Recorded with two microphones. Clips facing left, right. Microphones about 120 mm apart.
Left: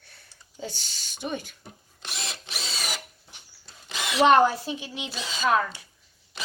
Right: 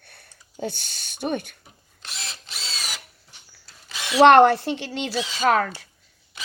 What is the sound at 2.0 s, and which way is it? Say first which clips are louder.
Drill: left 2 dB; centre (ahead or behind).